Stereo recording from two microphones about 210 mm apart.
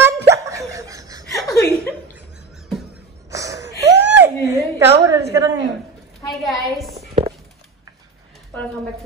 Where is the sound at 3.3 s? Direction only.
15° right (ahead or behind).